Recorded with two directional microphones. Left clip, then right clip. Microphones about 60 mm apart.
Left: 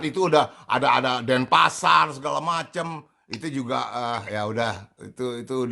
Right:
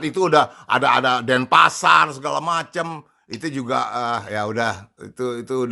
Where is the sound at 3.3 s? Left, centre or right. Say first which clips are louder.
Right 5 dB; right.